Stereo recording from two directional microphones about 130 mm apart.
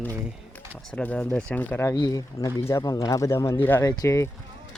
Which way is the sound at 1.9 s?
30° left (ahead or behind).